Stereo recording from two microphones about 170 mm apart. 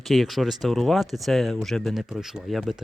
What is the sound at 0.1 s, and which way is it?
Speech, centre (ahead or behind).